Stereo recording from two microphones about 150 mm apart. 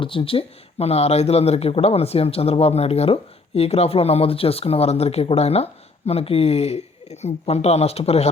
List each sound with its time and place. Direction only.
0.0 s speech: 35° left (ahead or behind)